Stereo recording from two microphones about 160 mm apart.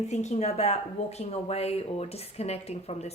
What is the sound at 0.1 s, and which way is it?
Speech, 45° left (ahead or behind).